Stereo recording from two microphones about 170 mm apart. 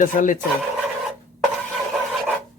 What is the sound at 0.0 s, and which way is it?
Speech, 50° left (ahead or behind).